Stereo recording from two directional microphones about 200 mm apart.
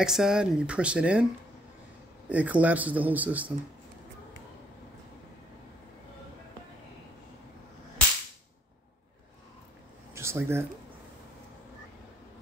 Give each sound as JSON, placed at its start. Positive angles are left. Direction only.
{"t": 0.0, "sound": "speech", "side_deg": 0}
{"t": 2.2, "sound": "a man's voice", "side_deg": -5}
{"t": 10.1, "sound": "a sound", "side_deg": -15}